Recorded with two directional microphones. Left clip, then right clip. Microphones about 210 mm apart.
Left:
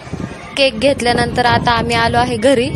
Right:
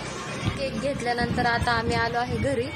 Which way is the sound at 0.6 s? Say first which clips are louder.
Left 17 dB; 45° left (ahead or behind).